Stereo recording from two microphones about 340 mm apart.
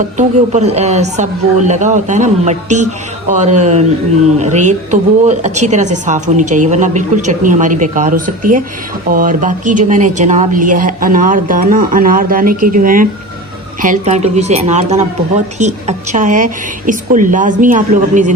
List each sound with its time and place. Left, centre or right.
0.2 s speech: centre